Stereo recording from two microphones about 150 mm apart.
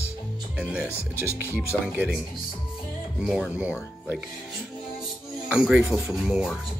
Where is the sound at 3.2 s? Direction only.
Centre (ahead or behind).